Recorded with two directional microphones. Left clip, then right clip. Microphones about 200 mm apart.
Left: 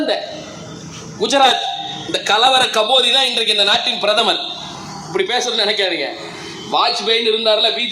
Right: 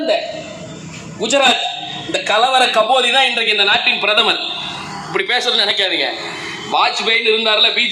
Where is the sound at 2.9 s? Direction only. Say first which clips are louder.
Right 1 dB; 70° left (ahead or behind).